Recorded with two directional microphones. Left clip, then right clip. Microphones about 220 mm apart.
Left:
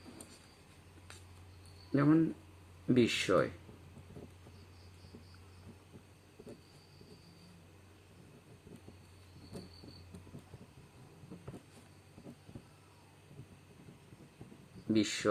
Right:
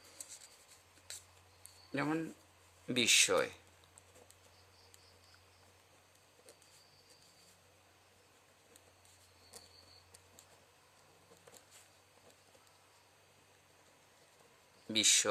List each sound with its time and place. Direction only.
1.9 s speech: 50° right (ahead or behind)
14.9 s speech: 50° right (ahead or behind)